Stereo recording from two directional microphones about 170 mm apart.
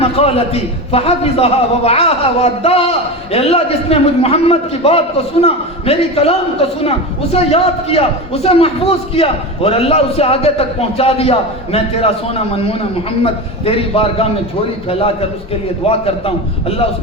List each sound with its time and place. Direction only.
0.2 s a man's voice: 35° left (ahead or behind)
15.9 s a man's voice: 35° left (ahead or behind)